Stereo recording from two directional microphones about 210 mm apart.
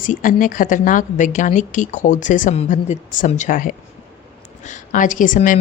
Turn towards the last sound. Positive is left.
turn(degrees=40)  # may be behind; listen again after turning